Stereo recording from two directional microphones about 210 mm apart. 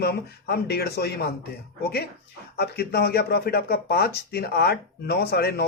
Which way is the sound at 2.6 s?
50° left (ahead or behind).